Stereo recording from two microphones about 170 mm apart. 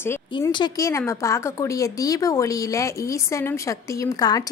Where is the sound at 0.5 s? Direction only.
25° left (ahead or behind).